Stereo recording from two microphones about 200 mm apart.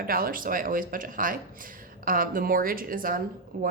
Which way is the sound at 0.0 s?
45° right (ahead or behind).